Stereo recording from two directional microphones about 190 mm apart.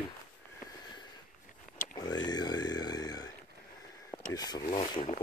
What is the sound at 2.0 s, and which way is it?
Speech, 20° left (ahead or behind).